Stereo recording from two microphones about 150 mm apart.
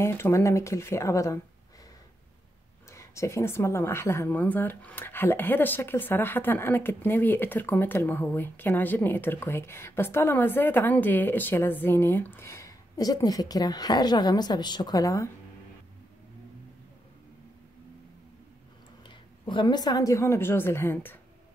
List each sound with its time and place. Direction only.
0.0 s speech: 15° left (ahead or behind)
2.9 s speech: 20° left (ahead or behind)
19.0 s a woman's voice: 30° left (ahead or behind); by 21.2 s 15° left (ahead or behind)